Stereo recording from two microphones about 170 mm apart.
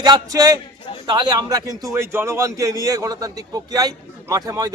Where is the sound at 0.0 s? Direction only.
20° right (ahead or behind).